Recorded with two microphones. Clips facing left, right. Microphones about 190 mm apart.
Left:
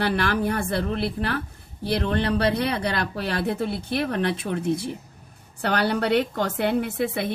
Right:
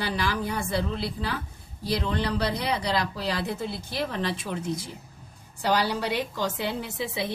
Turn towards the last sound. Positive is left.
turn(degrees=55)  # may be behind; listen again after turning